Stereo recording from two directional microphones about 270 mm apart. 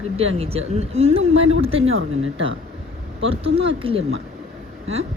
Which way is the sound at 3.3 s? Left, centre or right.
Right.